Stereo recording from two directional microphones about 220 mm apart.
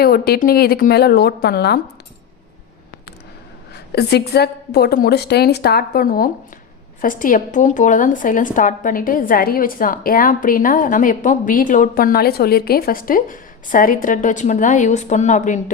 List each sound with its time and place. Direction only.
0.0 s a woman's voice: 45° left (ahead or behind)
3.7 s a woman's voice: 45° left (ahead or behind)